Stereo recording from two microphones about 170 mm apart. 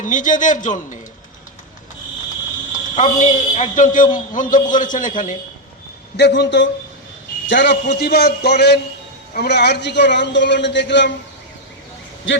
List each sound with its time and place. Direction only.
0.0 s a man's voice: 50° left (ahead or behind)
2.9 s a man's voice: 45° left (ahead or behind)
6.1 s a man's voice: 80° left
12.3 s a man's voice: 90° left